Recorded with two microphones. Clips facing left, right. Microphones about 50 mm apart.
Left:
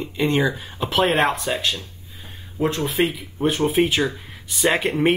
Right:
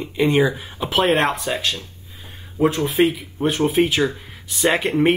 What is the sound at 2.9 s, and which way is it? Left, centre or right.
Speech, centre.